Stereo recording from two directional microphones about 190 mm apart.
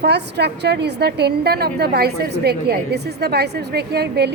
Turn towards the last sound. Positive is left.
turn(degrees=-60)  # may be behind; listen again after turning